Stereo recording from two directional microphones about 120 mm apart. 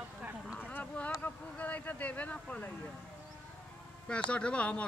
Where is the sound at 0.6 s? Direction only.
15° left (ahead or behind).